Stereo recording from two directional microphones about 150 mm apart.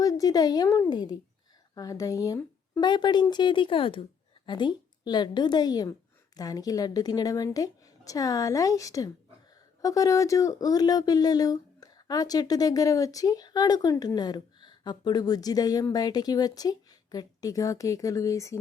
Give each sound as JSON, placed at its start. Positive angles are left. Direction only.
{"t": 0.0, "sound": "speech", "side_deg": 25}